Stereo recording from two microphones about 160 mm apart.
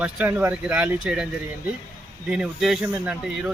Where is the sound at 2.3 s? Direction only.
5° right (ahead or behind).